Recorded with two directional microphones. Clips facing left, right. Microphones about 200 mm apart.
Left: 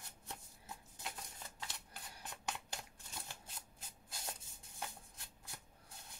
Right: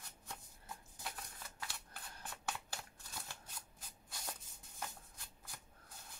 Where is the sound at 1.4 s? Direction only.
20° left (ahead or behind).